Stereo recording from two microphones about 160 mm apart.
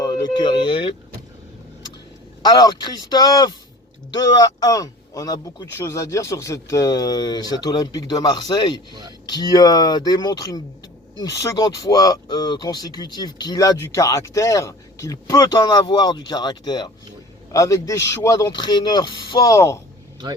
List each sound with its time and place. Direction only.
0.0 s speech: 25° left (ahead or behind)
2.4 s speech: 25° left (ahead or behind)
8.9 s speech: 25° right (ahead or behind)
9.3 s speech: 25° left (ahead or behind)